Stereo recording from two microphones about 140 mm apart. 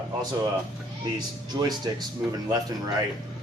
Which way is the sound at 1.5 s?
30° right (ahead or behind).